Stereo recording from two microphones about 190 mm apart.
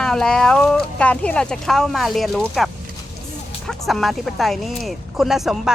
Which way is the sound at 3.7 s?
Centre (ahead or behind).